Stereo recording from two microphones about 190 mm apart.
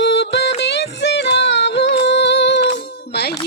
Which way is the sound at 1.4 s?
65° left (ahead or behind).